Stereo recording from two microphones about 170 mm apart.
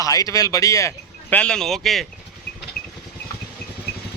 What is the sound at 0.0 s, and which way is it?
Speech, 20° left (ahead or behind).